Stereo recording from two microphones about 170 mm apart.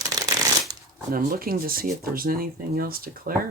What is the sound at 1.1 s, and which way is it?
Speech, 60° right (ahead or behind).